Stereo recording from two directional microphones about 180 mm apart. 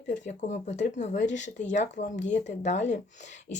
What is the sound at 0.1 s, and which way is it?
Speech, 40° left (ahead or behind).